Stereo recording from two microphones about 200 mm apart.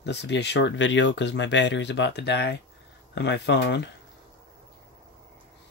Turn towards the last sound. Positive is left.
turn(degrees=60)  # may be behind; listen again after turning